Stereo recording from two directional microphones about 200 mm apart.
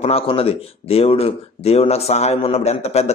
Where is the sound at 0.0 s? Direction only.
30° left (ahead or behind).